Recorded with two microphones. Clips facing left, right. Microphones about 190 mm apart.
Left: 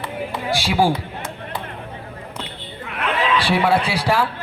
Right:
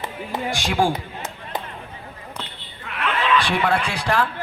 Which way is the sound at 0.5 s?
5° left (ahead or behind).